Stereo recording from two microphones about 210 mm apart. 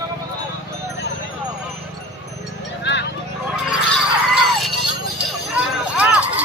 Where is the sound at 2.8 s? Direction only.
55° left (ahead or behind).